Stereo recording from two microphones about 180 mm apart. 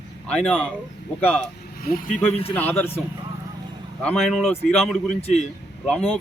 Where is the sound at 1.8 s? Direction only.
50° left (ahead or behind).